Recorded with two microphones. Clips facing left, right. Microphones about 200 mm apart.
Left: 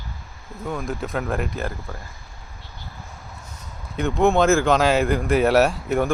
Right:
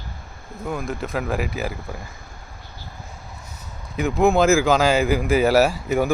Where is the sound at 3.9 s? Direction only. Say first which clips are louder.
Right 1 dB; 5° right (ahead or behind).